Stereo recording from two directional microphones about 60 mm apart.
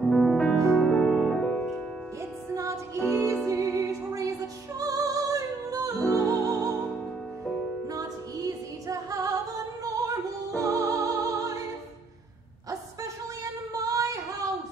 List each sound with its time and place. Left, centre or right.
0.0 s music: centre
2.5 s music: right
7.9 s music: right
13.8 s female singing: right